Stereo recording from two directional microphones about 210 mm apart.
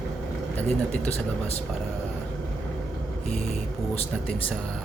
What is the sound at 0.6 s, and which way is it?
Speech, 5° left (ahead or behind).